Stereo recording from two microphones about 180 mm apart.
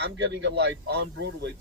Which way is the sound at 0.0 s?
70° right (ahead or behind).